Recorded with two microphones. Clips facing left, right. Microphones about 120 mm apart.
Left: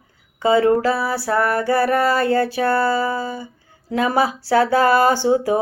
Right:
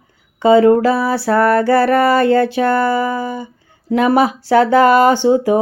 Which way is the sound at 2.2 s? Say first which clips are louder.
Right 5 dB; 65° right (ahead or behind).